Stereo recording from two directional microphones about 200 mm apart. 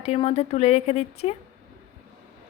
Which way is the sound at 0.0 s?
30° left (ahead or behind).